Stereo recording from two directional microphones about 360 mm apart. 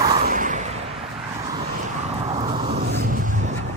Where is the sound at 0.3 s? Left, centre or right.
Right.